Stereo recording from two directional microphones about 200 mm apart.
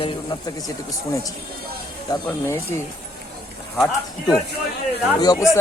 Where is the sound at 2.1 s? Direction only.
20° left (ahead or behind).